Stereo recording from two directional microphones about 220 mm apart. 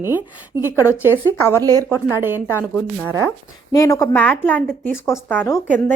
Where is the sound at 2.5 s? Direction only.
10° left (ahead or behind).